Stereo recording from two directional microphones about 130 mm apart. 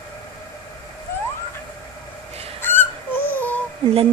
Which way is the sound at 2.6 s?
15° left (ahead or behind).